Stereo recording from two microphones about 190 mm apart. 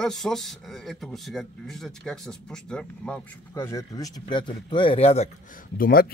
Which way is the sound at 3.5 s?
15° left (ahead or behind).